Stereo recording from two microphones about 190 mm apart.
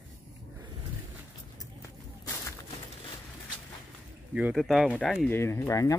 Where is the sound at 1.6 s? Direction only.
15° left (ahead or behind).